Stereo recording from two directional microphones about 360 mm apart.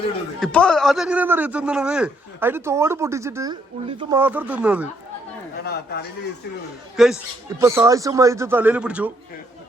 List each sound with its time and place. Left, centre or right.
0.3 s a man's voice: centre
5.6 s speech: left
6.9 s a man's voice: centre